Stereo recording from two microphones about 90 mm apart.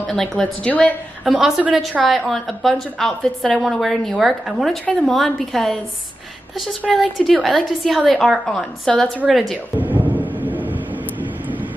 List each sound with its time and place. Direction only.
0.0 s a woman's voice: 5° left (ahead or behind)
0.7 s a woman's voice: 15° left (ahead or behind)
1.2 s a woman's voice: 5° right (ahead or behind)
6.9 s a woman's voice: centre (ahead or behind)
9.8 s thunder: 20° right (ahead or behind)
10.4 s vehicle: 20° right (ahead or behind)